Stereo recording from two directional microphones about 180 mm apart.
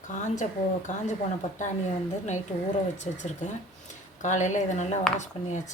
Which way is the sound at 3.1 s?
45° left (ahead or behind).